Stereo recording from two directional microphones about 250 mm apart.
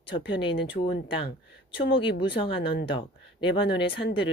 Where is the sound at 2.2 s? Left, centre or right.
Centre.